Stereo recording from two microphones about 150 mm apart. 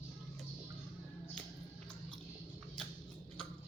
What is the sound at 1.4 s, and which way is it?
Music, 5° left (ahead or behind).